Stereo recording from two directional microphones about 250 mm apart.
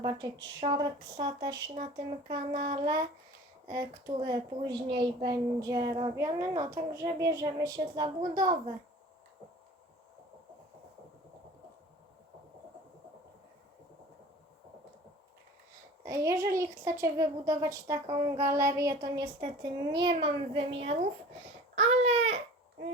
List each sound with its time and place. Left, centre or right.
0.0 s a child's voice: centre
3.7 s a child's voice: centre
16.0 s a child's voice: centre
21.8 s a sound: right